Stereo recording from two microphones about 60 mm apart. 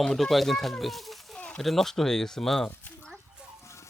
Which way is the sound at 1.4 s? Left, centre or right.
Centre.